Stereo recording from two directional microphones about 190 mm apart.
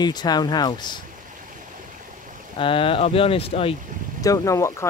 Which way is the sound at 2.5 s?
30° left (ahead or behind).